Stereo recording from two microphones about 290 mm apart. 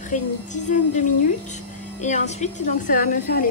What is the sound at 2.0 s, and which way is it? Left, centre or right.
A woman's voice, left.